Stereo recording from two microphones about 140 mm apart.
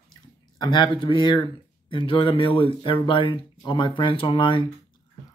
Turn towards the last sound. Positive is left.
turn(degrees=35)  # may be behind; listen again after turning